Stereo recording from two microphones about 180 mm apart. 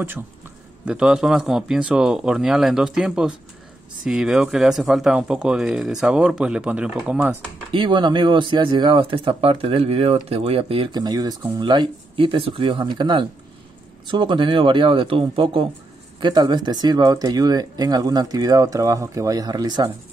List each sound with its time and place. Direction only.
0.8 s speech: 5° right (ahead or behind)
7.7 s speech: 25° right (ahead or behind)